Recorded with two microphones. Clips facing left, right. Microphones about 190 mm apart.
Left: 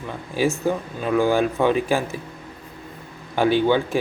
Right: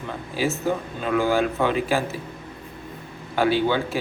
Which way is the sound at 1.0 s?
15° left (ahead or behind).